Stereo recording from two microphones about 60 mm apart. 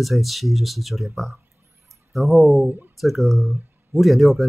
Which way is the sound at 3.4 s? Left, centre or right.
Right.